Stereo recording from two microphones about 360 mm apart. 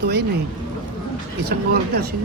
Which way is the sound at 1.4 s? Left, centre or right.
Right.